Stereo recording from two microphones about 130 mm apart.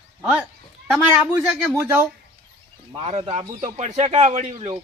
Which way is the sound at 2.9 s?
55° right (ahead or behind).